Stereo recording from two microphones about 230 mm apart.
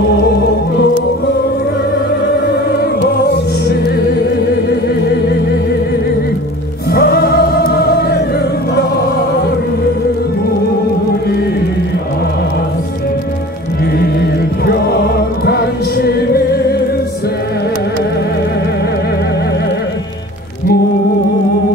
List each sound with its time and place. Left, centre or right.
3.6 s music: left
6.9 s music: left
13.9 s music: left